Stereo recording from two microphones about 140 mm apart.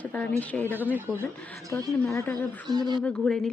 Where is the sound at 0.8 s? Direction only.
15° right (ahead or behind).